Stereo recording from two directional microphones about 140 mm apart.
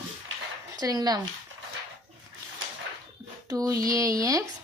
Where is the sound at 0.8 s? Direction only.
25° right (ahead or behind).